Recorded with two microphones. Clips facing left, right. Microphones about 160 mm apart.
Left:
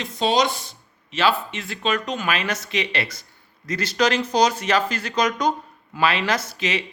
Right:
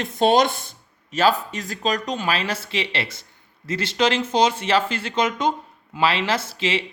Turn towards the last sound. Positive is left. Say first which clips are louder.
# right 1 dB
turn(degrees=-25)  # may be behind; listen again after turning